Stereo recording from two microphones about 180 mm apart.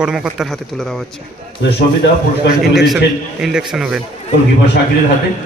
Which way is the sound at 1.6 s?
70° left (ahead or behind).